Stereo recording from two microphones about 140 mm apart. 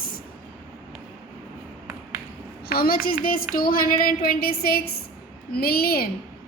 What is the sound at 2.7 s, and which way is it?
A woman's voice, 90° left.